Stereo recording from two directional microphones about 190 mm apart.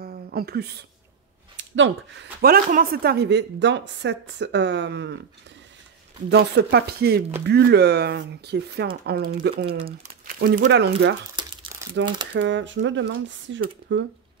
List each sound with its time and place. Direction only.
0.0 s a sound: 50° right (ahead or behind)
1.6 s speech: 75° right (ahead or behind)
2.4 s a woman's voice: 50° right (ahead or behind); by 5.2 s 65° right (ahead or behind)
6.3 s a woman's voice: 60° right (ahead or behind)
10.2 s crumpling: 50° right (ahead or behind)
10.6 s a woman's voice: 65° right (ahead or behind)
11.4 s crumpling: 25° right (ahead or behind)
12.4 s speech: 75° right (ahead or behind)